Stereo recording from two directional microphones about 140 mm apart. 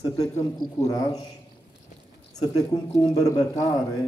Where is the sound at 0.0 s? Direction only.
25° left (ahead or behind).